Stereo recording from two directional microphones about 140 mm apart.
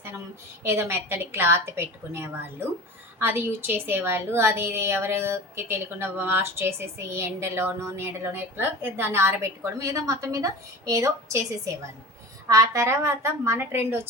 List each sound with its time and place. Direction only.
0.6 s a woman's voice: 20° right (ahead or behind)